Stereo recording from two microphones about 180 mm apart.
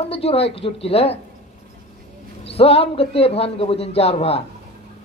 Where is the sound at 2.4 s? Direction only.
35° left (ahead or behind).